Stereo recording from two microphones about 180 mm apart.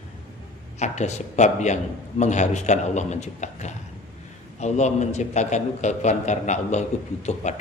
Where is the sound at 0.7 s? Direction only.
40° left (ahead or behind).